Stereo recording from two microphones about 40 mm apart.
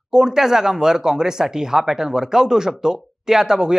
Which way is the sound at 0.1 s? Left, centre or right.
Centre.